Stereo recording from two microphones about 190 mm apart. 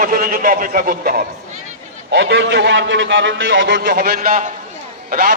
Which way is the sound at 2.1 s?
70° right (ahead or behind).